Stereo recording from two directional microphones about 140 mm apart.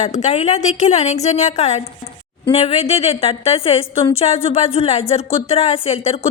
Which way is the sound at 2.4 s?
45° left (ahead or behind).